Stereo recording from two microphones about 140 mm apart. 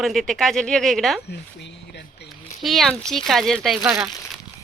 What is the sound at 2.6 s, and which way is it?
Speech, centre (ahead or behind).